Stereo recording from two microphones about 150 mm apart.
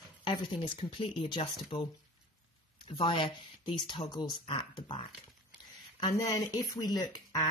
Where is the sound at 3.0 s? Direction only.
35° left (ahead or behind).